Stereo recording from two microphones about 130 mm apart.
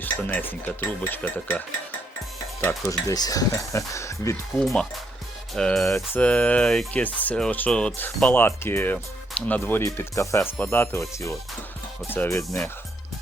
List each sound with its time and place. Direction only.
0.0 s speech: 15° left (ahead or behind)
2.8 s speech: 30° left (ahead or behind)
4.6 s speech: centre (ahead or behind); by 12.5 s 20° left (ahead or behind)